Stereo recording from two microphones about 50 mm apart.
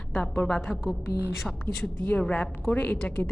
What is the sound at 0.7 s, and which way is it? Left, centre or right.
Speech, centre.